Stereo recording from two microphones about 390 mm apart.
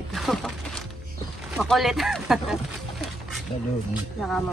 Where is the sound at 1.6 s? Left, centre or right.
Centre.